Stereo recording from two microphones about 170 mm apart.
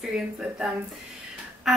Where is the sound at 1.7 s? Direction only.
Centre (ahead or behind).